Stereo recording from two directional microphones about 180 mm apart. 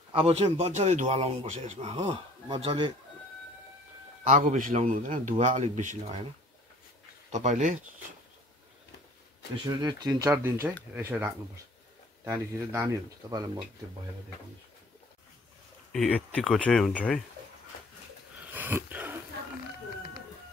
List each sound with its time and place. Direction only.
0.1 s a man's voice: 35° right (ahead or behind)
4.2 s a man's voice: 45° right (ahead or behind)
7.2 s a man's voice: 40° right (ahead or behind)
9.7 s speech: 25° right (ahead or behind)
15.9 s speech: 5° left (ahead or behind)
18.5 s dog: 10° right (ahead or behind)